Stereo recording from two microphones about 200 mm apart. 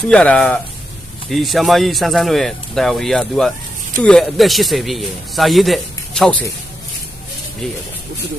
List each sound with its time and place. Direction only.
0.1 s a man's voice: 5° left (ahead or behind)
7.6 s a man's voice: 5° left (ahead or behind)